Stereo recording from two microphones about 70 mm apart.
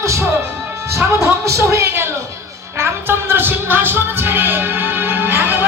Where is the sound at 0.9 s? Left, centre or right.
Right.